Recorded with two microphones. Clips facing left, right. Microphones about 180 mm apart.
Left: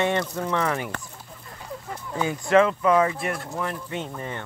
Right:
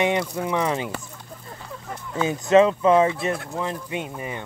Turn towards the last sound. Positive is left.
turn(degrees=-10)  # may be behind; listen again after turning